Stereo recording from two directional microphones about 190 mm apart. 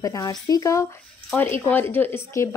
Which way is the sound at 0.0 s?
20° left (ahead or behind).